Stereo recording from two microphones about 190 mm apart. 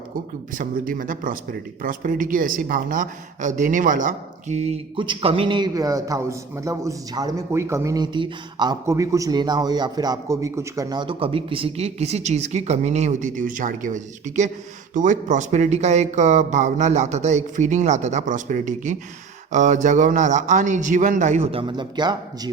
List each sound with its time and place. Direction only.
0.5 s speech: 45° right (ahead or behind); by 22.5 s 20° right (ahead or behind)